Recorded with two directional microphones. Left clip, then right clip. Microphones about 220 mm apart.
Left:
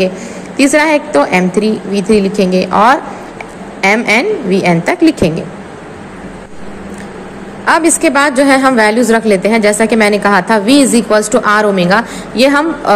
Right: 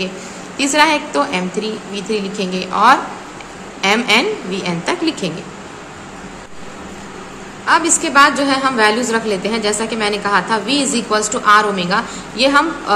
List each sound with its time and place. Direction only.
0.6 s a woman's voice: 25° left (ahead or behind)
7.6 s a woman's voice: 30° left (ahead or behind)